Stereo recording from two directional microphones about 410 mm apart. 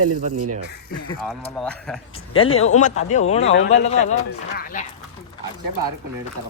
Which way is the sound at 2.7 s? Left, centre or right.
Centre.